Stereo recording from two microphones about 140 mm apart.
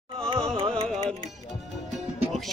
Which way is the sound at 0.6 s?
40° right (ahead or behind).